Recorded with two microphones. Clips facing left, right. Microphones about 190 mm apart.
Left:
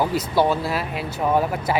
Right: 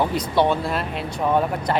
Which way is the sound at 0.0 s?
5° left (ahead or behind).